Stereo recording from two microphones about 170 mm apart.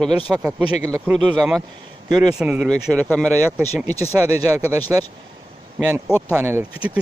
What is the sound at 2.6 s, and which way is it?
Speech, 5° left (ahead or behind).